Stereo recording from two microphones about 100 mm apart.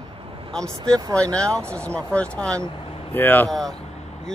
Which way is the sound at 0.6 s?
35° right (ahead or behind).